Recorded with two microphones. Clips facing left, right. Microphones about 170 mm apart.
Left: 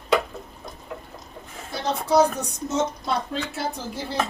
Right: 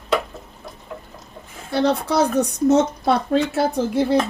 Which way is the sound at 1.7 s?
70° right (ahead or behind).